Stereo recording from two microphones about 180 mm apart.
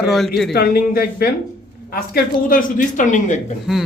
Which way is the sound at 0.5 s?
55° left (ahead or behind).